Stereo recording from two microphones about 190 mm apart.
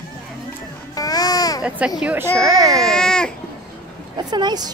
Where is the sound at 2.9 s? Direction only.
5° left (ahead or behind).